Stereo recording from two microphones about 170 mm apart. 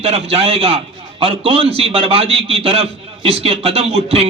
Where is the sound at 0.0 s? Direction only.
35° right (ahead or behind).